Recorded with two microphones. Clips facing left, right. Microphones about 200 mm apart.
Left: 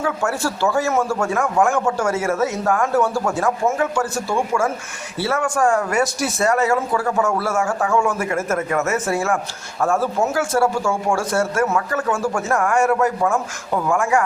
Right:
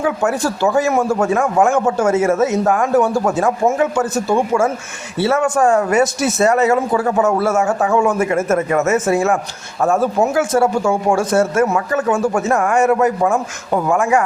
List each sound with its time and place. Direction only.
0.0 s speech: 15° right (ahead or behind)